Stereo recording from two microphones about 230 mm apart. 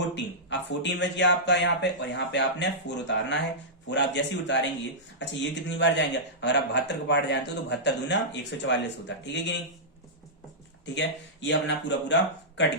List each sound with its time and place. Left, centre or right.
0.1 s a man's voice: left
10.8 s a man's voice: left